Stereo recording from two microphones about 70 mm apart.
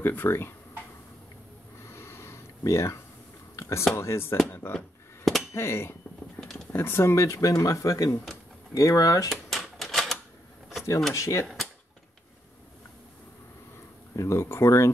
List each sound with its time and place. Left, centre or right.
0.0 s speech: left
1.8 s a sound: left
3.5 s whispering: left
3.9 s speech: left
5.2 s a sound: centre
5.5 s speech: left
6.4 s a sound: left
6.7 s speech: left
9.3 s typewriter: centre
11.1 s speech: left
14.1 s speech: left